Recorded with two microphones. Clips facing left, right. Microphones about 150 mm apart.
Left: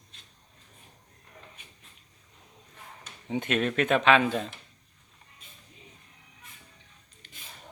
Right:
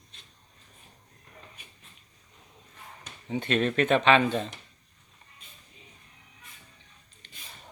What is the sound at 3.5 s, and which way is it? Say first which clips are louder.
Speech: right 2 dB; 5° left (ahead or behind).